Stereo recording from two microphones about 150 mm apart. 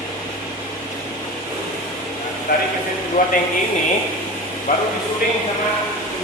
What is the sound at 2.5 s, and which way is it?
Speech, 90° left.